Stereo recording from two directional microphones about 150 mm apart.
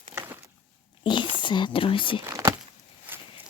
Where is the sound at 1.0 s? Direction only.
30° left (ahead or behind).